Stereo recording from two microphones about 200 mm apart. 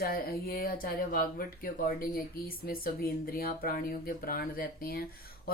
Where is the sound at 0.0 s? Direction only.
50° left (ahead or behind).